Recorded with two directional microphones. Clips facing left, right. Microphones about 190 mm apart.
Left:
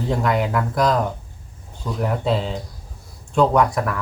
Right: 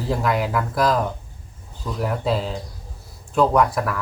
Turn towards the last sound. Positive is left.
turn(degrees=0)  # may be behind; listen again after turning